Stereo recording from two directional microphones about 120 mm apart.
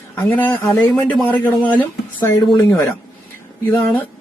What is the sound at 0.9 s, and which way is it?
Speech, 15° left (ahead or behind).